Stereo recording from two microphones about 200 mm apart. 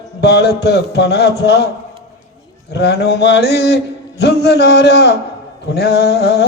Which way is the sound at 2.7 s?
55° left (ahead or behind).